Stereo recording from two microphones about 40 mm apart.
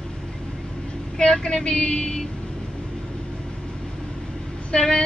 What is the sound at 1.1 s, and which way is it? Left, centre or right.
Speech, centre.